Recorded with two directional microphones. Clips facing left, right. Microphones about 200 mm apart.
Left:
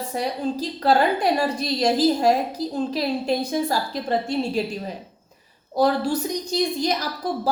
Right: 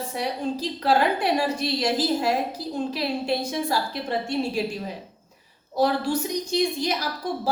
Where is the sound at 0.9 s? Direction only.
40° left (ahead or behind).